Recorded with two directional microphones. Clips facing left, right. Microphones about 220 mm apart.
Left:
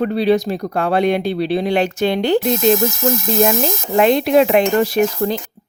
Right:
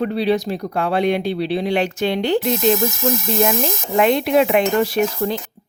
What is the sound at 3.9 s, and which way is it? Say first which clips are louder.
Speech: left 3 dB; 35° left (ahead or behind).